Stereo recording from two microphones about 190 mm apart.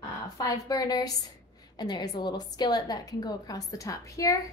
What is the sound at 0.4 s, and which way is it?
A woman's voice, 20° left (ahead or behind).